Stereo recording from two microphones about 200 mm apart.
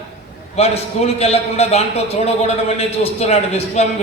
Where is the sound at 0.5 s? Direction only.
30° left (ahead or behind).